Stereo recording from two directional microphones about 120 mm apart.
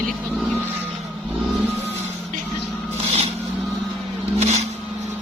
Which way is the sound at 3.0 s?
60° right (ahead or behind).